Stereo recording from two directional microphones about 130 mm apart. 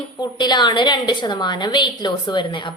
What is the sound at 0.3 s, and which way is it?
A woman's voice, 35° left (ahead or behind).